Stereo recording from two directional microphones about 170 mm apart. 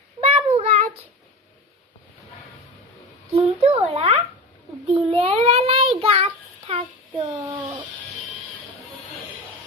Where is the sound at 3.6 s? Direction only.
35° right (ahead or behind).